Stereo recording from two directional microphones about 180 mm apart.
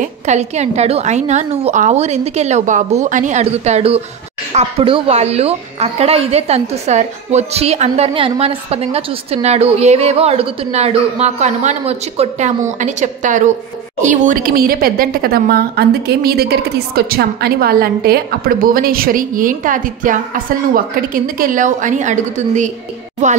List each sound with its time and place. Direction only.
0.0 s a woman's voice: 40° right (ahead or behind)